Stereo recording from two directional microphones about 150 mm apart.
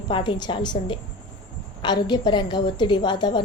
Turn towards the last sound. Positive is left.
turn(degrees=30)  # may be behind; listen again after turning